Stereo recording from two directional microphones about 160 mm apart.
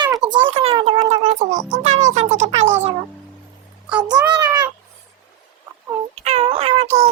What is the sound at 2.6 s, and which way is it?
Music, 15° right (ahead or behind).